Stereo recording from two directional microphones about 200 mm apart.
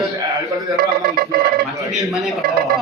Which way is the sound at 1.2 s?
50° right (ahead or behind).